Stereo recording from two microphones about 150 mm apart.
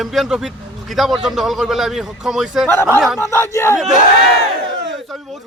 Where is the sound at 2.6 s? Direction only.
15° left (ahead or behind).